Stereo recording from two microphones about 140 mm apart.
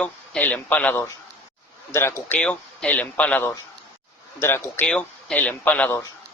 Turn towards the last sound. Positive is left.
turn(degrees=10)  # may be behind; listen again after turning